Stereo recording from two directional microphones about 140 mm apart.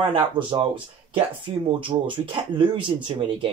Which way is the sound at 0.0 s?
35° right (ahead or behind).